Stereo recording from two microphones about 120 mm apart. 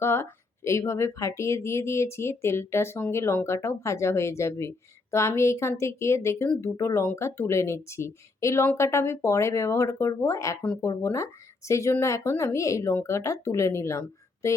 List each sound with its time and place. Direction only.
0.0 s speech: 20° left (ahead or behind)
10.6 s speech: 15° left (ahead or behind)
10.8 s speech: 25° left (ahead or behind)